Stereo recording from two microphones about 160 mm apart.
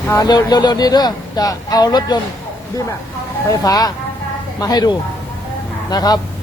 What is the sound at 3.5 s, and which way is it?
Speech, 25° left (ahead or behind).